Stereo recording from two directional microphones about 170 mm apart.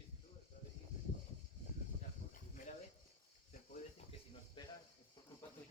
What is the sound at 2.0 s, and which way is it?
Snake, 50° left (ahead or behind).